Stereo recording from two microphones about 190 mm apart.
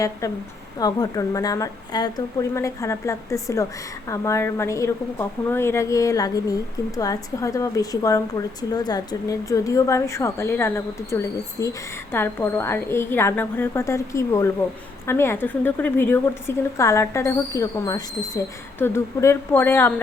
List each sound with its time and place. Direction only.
0.8 s a woman's voice: 20° left (ahead or behind)